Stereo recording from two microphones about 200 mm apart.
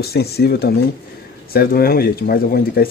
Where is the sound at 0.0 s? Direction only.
50° left (ahead or behind).